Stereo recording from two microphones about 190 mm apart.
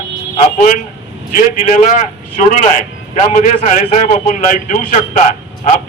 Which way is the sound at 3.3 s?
40° left (ahead or behind).